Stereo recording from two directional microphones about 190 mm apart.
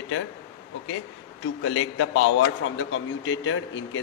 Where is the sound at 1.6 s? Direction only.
90° left.